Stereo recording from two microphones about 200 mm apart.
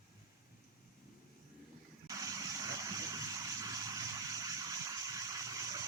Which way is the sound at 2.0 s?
15° right (ahead or behind).